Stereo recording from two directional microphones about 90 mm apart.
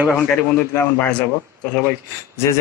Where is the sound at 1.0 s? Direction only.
10° left (ahead or behind).